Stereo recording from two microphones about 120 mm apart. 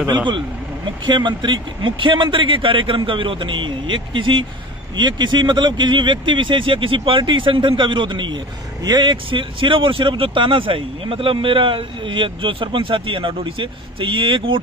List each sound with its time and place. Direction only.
1.0 s speech: 40° right (ahead or behind)